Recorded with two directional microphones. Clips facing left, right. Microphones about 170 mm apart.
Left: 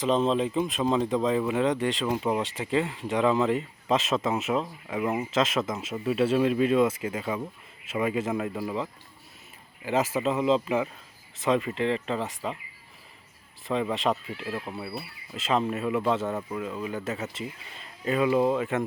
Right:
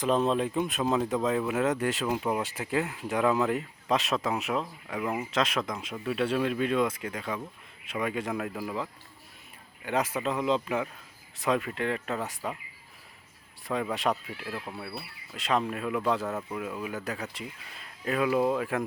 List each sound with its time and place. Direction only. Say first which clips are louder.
0.0 s speech: left 2 dB; centre (ahead or behind)
13.7 s speech: left 2 dB; centre (ahead or behind)